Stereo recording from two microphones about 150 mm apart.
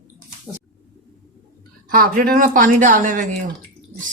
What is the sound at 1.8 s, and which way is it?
Speech, 70° right (ahead or behind).